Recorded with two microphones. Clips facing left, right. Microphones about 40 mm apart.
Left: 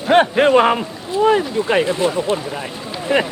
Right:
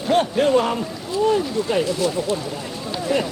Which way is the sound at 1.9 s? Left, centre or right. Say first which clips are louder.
Left 4 dB; left.